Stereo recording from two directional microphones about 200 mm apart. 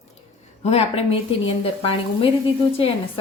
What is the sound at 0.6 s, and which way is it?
Speech, 30° left (ahead or behind).